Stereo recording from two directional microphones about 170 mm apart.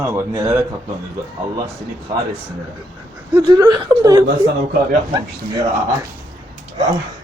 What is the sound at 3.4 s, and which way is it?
Speech, 25° right (ahead or behind).